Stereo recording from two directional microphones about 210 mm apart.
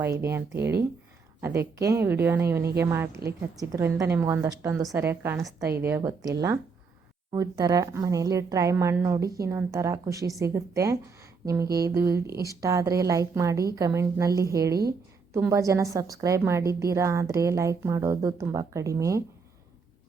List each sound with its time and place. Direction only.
0.0 s a woman's voice: 10° right (ahead or behind)